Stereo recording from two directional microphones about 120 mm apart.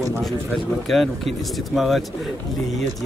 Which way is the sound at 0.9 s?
Centre (ahead or behind).